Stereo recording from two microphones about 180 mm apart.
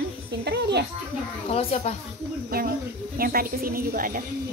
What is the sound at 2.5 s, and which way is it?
A woman's voice, 55° right (ahead or behind).